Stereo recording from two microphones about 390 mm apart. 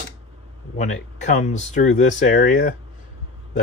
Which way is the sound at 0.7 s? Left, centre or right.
Centre.